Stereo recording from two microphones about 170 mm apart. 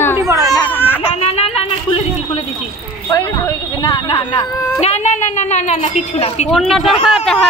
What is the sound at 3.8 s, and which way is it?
A woman's voice, 30° left (ahead or behind).